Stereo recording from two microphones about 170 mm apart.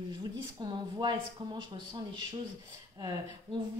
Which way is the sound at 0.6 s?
25° right (ahead or behind).